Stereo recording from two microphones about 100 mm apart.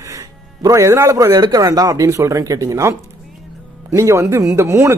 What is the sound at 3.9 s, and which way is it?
Speech, 30° right (ahead or behind).